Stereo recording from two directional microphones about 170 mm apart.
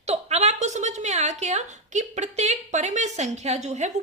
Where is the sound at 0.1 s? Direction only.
40° right (ahead or behind).